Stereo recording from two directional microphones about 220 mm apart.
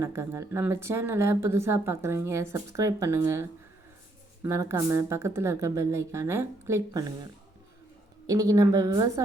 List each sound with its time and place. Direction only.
0.0 s speech: 15° right (ahead or behind)
4.4 s speech: 10° right (ahead or behind)
8.3 s speech: 15° right (ahead or behind)